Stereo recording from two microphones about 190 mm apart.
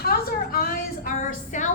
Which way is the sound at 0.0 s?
55° left (ahead or behind).